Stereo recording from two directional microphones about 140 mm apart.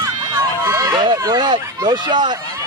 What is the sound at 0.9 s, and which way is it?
Speech, 30° right (ahead or behind).